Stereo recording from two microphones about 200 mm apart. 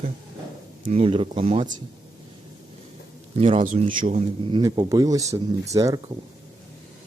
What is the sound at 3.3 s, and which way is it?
Speech, 30° right (ahead or behind).